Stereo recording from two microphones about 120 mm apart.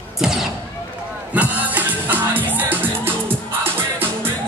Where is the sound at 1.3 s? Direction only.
15° right (ahead or behind).